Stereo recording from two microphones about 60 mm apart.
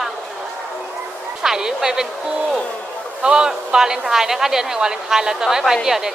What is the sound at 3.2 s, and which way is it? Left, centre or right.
Speech, centre.